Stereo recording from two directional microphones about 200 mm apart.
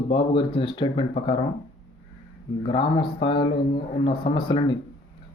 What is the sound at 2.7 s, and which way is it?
Speech, 25° left (ahead or behind).